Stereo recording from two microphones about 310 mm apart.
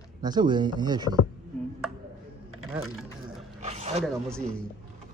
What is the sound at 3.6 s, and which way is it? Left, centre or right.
Dog, right.